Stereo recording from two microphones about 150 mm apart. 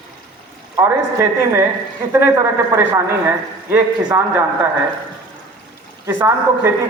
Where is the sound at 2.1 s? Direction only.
20° right (ahead or behind).